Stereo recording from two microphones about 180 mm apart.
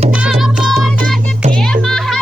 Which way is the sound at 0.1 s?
5° right (ahead or behind).